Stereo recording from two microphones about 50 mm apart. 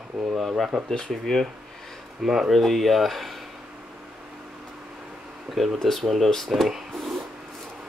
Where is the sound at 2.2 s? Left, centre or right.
Centre.